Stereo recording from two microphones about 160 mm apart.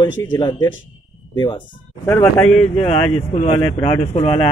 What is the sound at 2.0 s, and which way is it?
Speech, 10° left (ahead or behind).